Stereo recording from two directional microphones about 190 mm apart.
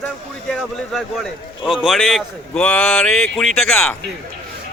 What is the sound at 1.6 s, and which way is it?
Speech, centre (ahead or behind).